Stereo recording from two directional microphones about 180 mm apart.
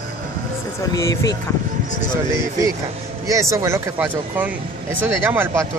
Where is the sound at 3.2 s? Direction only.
15° right (ahead or behind).